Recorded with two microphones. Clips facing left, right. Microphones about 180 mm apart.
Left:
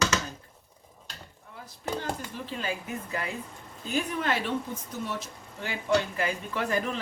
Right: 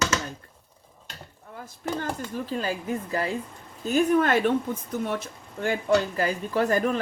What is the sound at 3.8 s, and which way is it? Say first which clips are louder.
Speech: right 8 dB; 45° right (ahead or behind).